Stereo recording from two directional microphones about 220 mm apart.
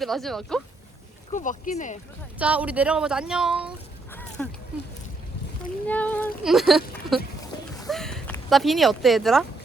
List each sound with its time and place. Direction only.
0.0 s speech: centre (ahead or behind)
1.3 s speech: 35° left (ahead or behind)
2.4 s speech: 5° right (ahead or behind)
4.1 s a sound: 10° left (ahead or behind)
5.9 s speech: 5° left (ahead or behind)